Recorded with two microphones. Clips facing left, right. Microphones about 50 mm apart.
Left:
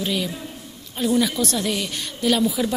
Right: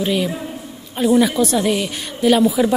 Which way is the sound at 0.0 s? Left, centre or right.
Centre.